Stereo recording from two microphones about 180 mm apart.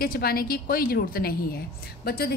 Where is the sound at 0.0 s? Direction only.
55° left (ahead or behind).